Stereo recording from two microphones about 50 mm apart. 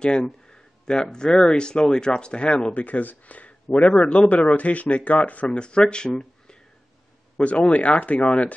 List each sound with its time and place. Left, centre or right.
0.0 s speech: centre
2.7 s speech: left
7.3 s speech: left